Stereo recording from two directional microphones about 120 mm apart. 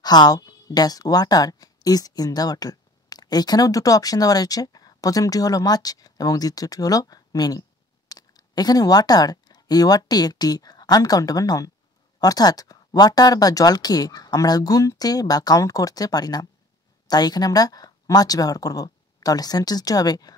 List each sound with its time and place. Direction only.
0.0 s speech: 35° left (ahead or behind)